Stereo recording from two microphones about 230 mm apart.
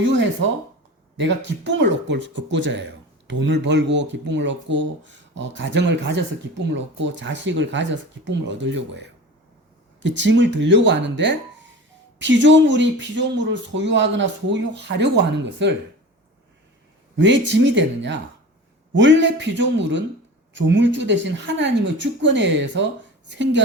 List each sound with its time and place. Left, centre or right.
1.1 s speech: right
17.2 s speech: right